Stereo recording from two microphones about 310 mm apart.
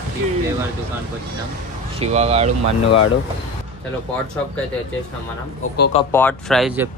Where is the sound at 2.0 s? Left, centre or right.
Centre.